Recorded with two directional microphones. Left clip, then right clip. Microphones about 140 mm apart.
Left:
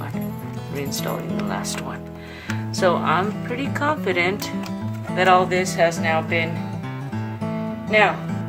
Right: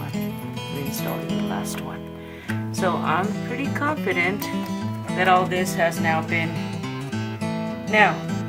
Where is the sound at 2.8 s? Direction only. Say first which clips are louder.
Left 4 dB; 35° left (ahead or behind).